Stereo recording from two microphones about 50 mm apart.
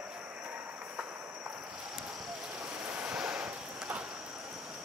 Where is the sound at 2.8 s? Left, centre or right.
Right.